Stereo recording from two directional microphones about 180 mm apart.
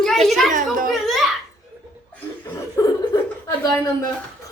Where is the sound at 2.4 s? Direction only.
15° left (ahead or behind).